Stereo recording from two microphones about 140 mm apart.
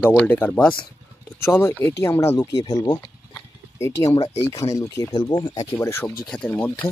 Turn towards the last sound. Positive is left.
turn(degrees=10)  # may be behind; listen again after turning